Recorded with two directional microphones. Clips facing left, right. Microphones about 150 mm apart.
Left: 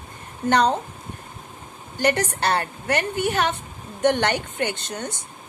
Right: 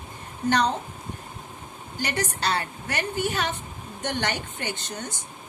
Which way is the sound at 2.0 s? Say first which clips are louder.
Left 6 dB; 55° left (ahead or behind).